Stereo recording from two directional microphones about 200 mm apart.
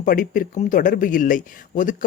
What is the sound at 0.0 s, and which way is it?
Speech, 45° left (ahead or behind).